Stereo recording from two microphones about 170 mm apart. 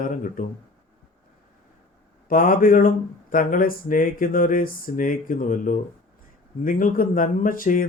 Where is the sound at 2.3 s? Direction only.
50° left (ahead or behind).